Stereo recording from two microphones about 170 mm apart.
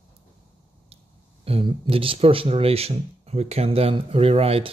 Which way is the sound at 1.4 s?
30° right (ahead or behind).